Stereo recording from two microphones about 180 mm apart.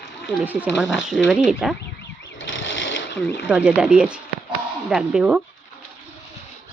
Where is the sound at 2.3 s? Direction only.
90° left.